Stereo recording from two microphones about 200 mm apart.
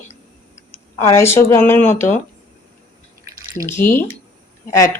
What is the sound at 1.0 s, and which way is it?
Speech, 15° left (ahead or behind).